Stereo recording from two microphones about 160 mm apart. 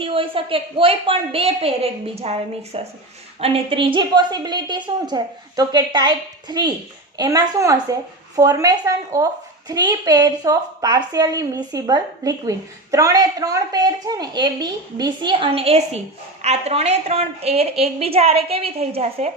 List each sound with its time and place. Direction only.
0.0 s a woman's voice: 35° right (ahead or behind)